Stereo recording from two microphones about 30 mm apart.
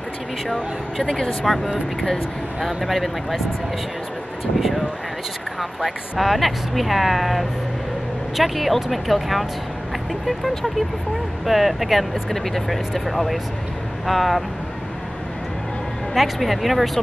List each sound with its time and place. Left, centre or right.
1.0 s speech: left
1.4 s speech: centre
4.6 s speech: centre
11.4 s speech: centre
12.1 s speech: centre
16.2 s speech: centre